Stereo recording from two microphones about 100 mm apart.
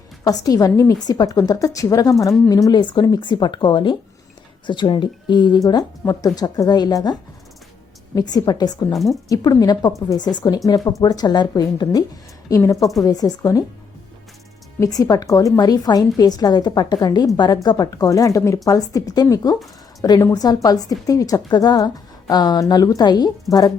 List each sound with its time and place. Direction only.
0.3 s a woman's voice: 40° left (ahead or behind)
5.6 s a woman's voice: 40° left (ahead or behind)
14.8 s a woman's voice: 40° left (ahead or behind)